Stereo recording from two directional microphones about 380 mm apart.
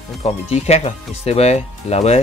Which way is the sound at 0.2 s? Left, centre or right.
Centre.